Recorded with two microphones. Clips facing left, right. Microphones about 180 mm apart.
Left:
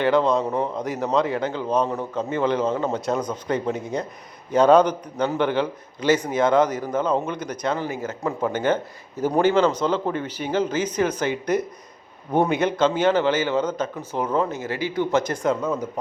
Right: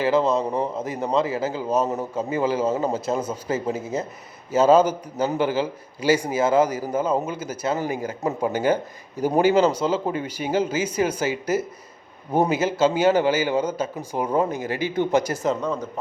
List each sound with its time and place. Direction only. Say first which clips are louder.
0.0 s a man's voice: left 1 dB; 5° right (ahead or behind)
15.6 s speech: left 1 dB; 10° left (ahead or behind)